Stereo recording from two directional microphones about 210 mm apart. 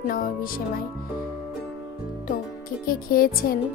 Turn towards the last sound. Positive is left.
turn(degrees=45)  # may be behind; listen again after turning